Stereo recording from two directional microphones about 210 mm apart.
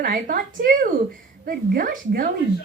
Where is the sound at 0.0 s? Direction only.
40° right (ahead or behind).